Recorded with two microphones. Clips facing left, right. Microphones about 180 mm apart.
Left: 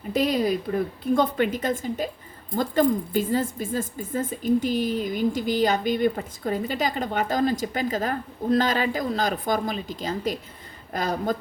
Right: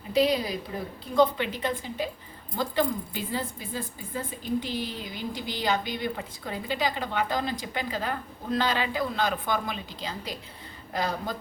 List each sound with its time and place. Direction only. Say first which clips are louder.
0.1 s speech: left 2 dB; 50° left (ahead or behind)